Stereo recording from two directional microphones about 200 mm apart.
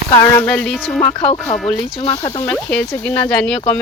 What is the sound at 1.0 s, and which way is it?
Speech, 20° left (ahead or behind).